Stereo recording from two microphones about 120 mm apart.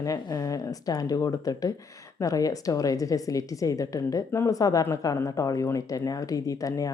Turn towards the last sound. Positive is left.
turn(degrees=30)  # may be behind; listen again after turning